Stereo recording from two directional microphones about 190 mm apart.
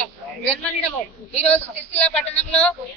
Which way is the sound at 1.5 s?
10° left (ahead or behind).